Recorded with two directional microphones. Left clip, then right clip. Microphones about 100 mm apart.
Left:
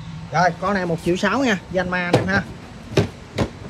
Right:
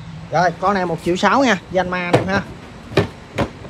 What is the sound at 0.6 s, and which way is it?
Speech, 50° right (ahead or behind).